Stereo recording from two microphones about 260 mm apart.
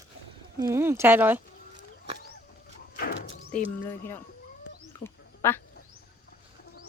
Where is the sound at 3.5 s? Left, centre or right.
Centre.